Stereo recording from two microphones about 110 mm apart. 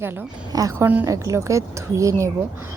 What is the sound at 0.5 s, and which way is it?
Speech, 30° right (ahead or behind).